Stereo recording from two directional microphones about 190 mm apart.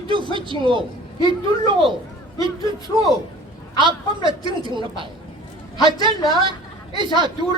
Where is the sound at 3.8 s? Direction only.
25° right (ahead or behind).